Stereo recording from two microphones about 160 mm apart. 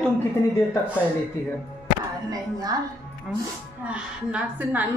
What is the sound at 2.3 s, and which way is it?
Speech, 25° right (ahead or behind).